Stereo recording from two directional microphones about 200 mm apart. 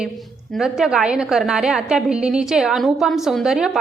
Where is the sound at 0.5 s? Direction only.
Centre (ahead or behind).